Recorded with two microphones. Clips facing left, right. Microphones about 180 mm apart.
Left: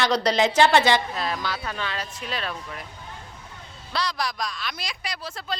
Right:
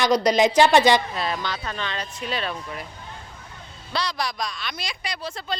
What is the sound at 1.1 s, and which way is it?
Speech, centre (ahead or behind).